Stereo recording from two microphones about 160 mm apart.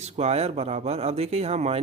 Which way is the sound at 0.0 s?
40° right (ahead or behind).